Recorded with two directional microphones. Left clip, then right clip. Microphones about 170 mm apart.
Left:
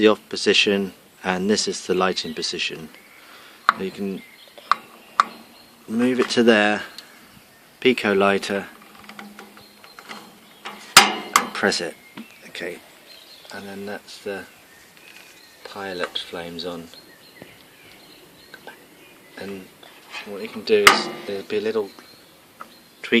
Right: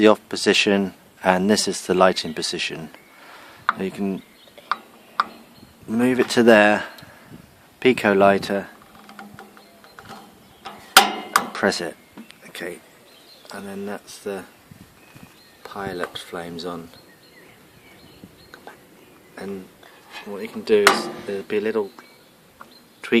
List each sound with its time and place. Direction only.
0.0 s speech: 55° right (ahead or behind)
5.9 s speech: 55° right (ahead or behind)
11.5 s speech: 45° right (ahead or behind)
15.6 s speech: 35° right (ahead or behind)
20.4 s speech: 40° right (ahead or behind)
21.1 s speech: centre (ahead or behind)
21.4 s speech: 40° right (ahead or behind)
23.0 s a sound: 55° right (ahead or behind)